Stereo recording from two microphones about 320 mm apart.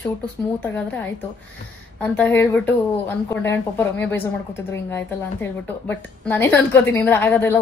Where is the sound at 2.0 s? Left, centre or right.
Centre.